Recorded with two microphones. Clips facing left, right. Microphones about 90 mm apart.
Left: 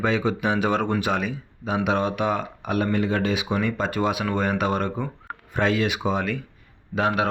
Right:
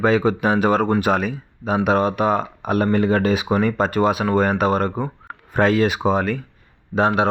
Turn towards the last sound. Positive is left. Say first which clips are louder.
# right 5 dB
turn(degrees=-30)  # may be behind; listen again after turning